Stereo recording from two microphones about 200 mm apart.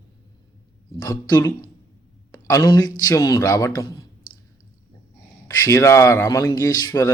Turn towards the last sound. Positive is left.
turn(degrees=15)  # may be behind; listen again after turning